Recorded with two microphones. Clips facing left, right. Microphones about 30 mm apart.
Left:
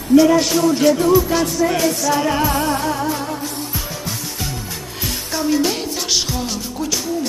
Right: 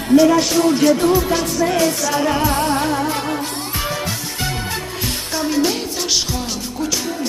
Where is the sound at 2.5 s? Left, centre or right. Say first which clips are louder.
Right 1 dB; right.